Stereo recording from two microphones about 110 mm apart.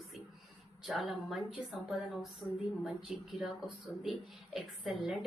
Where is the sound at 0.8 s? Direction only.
Centre (ahead or behind).